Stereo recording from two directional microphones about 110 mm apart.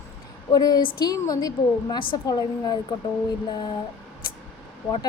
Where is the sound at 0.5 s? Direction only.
35° left (ahead or behind).